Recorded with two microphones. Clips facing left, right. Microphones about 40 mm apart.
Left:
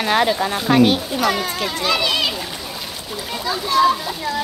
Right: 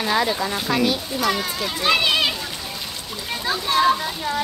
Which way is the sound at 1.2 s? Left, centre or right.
Centre.